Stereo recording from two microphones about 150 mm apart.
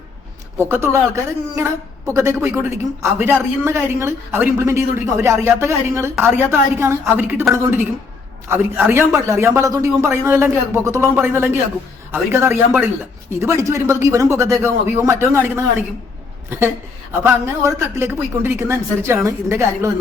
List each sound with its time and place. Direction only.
0.6 s a woman's voice: 15° right (ahead or behind)